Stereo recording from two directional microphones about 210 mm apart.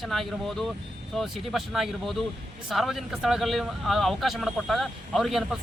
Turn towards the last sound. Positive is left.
turn(degrees=0)  # may be behind; listen again after turning